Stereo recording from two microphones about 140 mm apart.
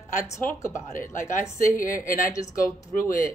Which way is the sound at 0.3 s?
20° left (ahead or behind).